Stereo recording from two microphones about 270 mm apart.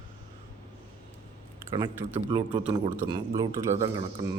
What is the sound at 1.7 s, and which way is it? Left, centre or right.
A man's voice, centre.